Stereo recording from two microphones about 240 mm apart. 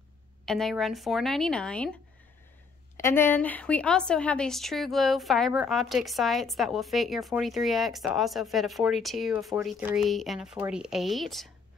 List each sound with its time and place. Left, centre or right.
0.5 s a woman's voice: centre
3.0 s a woman's voice: centre